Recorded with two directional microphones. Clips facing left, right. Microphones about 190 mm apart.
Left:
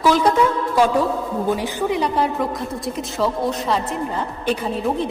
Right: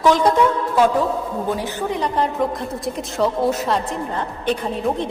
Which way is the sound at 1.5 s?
10° left (ahead or behind).